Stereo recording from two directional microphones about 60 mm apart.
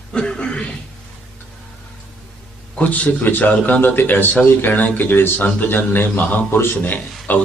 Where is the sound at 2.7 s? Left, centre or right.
Left.